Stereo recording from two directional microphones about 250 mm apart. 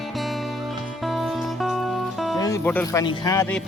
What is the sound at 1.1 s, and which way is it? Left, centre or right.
Music, centre.